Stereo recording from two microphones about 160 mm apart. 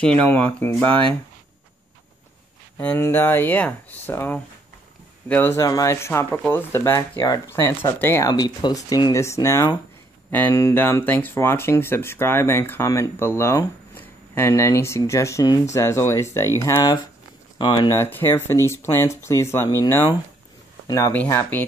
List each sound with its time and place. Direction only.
0.3 s speech: 10° left (ahead or behind)
2.8 s speech: 10° left (ahead or behind)